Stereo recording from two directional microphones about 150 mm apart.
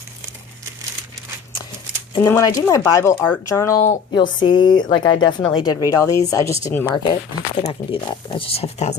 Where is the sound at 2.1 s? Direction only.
25° left (ahead or behind).